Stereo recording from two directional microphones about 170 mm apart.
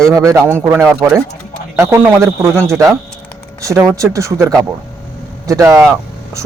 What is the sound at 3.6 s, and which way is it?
A man's voice, 15° right (ahead or behind).